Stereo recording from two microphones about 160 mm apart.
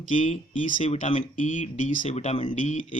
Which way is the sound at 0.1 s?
50° left (ahead or behind).